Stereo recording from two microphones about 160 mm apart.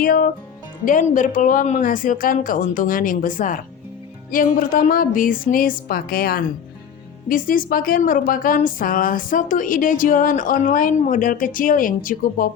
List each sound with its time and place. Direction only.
0.0 s a woman's voice: 65° left (ahead or behind)
0.9 s a woman's voice: 55° left (ahead or behind); by 6.4 s 70° left (ahead or behind)
7.3 s a woman's voice: 60° left (ahead or behind)